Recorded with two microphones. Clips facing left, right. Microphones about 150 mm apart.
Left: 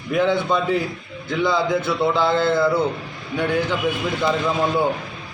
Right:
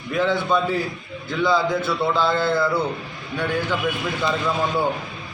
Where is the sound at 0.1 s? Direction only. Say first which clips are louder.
Left 2 dB; 15° left (ahead or behind).